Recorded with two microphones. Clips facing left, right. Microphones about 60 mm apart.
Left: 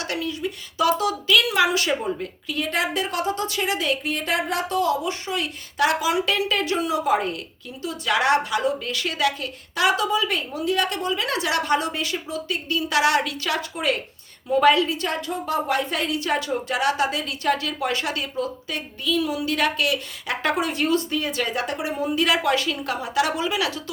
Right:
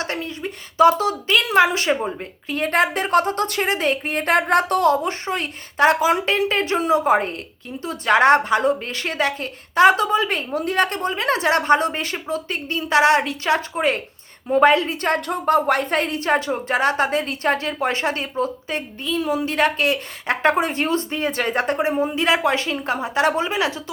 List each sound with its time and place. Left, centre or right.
0.0 s a woman's voice: right